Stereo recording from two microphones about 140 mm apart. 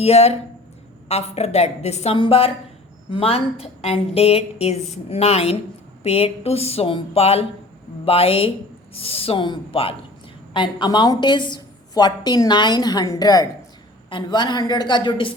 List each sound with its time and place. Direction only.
0.0 s a woman's voice: 50° left (ahead or behind)
2.1 s a woman's voice: 40° left (ahead or behind)